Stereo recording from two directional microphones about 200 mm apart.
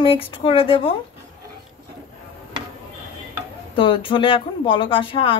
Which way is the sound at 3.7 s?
25° left (ahead or behind).